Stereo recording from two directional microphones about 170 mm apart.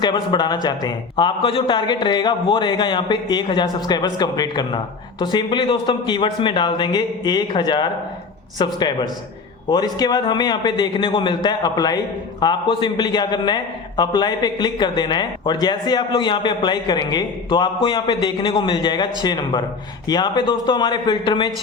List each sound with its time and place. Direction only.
0.0 s a man's voice: 25° left (ahead or behind)